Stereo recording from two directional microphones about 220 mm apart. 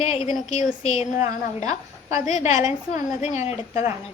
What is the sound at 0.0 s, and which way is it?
A woman's voice, 30° left (ahead or behind).